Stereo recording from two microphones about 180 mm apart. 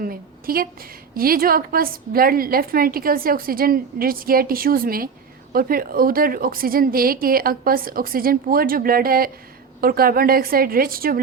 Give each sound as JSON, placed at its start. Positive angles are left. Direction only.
{"t": 0.0, "sound": "a woman's voice", "side_deg": -55}